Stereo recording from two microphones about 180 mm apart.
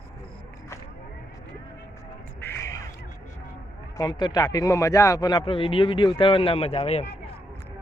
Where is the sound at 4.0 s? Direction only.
25° left (ahead or behind).